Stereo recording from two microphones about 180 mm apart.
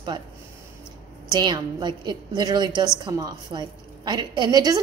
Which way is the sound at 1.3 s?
25° right (ahead or behind).